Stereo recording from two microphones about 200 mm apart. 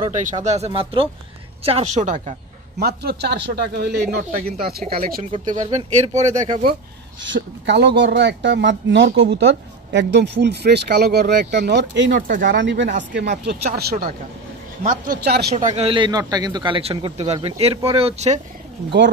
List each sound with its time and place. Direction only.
0.2 s speech: 40° right (ahead or behind)
2.8 s speech: 55° right (ahead or behind)
5.3 s speech: 30° right (ahead or behind)
7.2 s speech: 65° right (ahead or behind)
12.2 s speech: 45° right (ahead or behind)
12.5 s speech: 65° right (ahead or behind)
15.5 s a man's voice: 35° right (ahead or behind)